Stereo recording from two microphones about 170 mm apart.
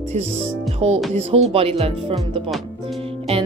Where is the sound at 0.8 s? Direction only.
40° right (ahead or behind).